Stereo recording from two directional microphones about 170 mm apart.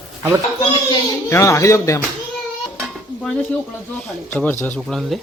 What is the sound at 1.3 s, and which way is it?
Speech, 15° left (ahead or behind).